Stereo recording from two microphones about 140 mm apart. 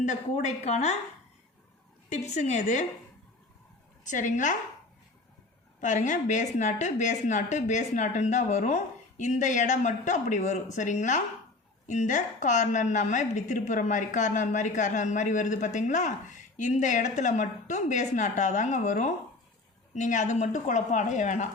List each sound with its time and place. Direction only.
0.0 s a woman's voice: 60° left (ahead or behind)
2.0 s a woman's voice: 55° left (ahead or behind)
4.0 s a woman's voice: 65° left (ahead or behind)
5.8 s a woman's voice: 60° left (ahead or behind)